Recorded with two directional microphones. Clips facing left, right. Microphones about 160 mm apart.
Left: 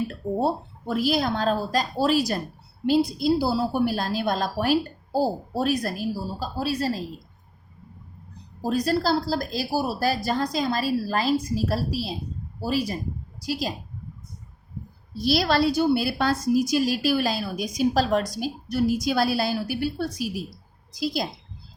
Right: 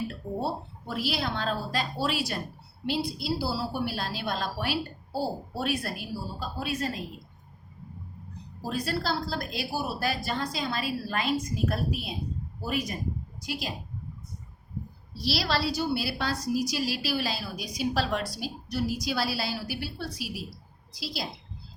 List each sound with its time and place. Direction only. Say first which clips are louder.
0.4 s a woman's voice: left 7 dB; 45° left (ahead or behind)
8.6 s a woman's voice: left 7 dB; 40° left (ahead or behind)
15.2 s a woman's voice: left 7 dB; 50° left (ahead or behind)